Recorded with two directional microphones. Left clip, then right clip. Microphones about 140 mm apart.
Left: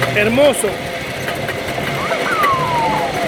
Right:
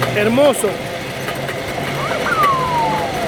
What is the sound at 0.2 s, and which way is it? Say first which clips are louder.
Speech: left 1 dB; 20° right (ahead or behind).